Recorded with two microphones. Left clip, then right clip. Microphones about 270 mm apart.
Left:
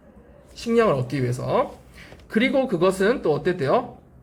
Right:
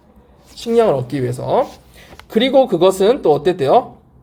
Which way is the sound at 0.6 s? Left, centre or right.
Centre.